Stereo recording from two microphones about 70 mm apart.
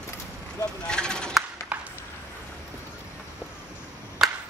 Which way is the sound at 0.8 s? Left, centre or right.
Centre.